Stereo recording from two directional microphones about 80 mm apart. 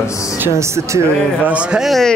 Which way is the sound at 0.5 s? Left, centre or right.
Right.